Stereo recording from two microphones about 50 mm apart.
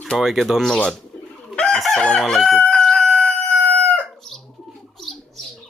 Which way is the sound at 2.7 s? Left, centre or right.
Centre.